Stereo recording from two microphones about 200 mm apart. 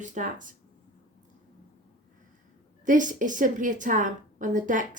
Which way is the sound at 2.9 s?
40° right (ahead or behind).